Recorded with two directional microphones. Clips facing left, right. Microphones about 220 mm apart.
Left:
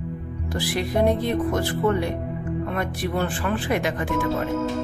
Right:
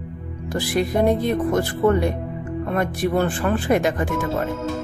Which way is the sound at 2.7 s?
45° right (ahead or behind).